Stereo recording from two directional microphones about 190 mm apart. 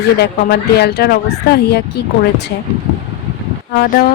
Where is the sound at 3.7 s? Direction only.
50° left (ahead or behind).